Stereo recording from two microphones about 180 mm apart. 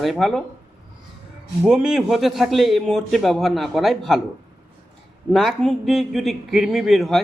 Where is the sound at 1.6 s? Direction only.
5° right (ahead or behind).